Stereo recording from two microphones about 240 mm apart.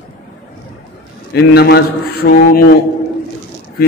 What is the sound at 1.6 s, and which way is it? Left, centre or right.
A man's voice, left.